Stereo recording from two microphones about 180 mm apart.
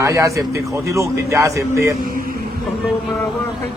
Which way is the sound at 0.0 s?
20° right (ahead or behind).